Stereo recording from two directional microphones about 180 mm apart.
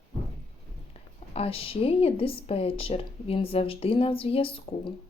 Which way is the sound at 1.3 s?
35° left (ahead or behind).